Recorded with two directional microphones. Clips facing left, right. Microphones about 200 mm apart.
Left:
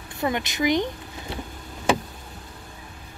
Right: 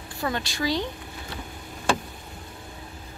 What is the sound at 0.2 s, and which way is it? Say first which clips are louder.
Speech: left 4 dB; 20° left (ahead or behind).